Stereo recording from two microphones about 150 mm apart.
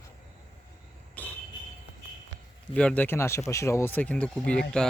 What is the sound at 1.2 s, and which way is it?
Speech, 10° left (ahead or behind).